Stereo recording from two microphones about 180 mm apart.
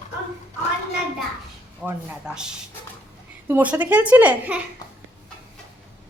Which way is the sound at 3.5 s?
10° right (ahead or behind).